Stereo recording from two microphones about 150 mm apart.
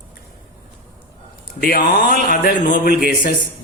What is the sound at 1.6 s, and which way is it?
Speech, 75° left (ahead or behind).